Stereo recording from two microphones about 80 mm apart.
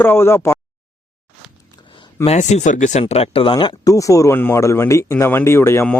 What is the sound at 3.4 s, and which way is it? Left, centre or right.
Speech, left.